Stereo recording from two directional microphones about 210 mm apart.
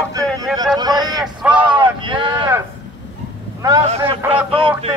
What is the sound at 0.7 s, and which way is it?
Vehicle, 20° right (ahead or behind).